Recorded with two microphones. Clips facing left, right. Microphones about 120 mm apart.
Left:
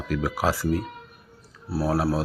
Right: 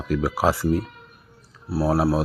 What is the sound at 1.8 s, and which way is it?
Speech, 20° right (ahead or behind).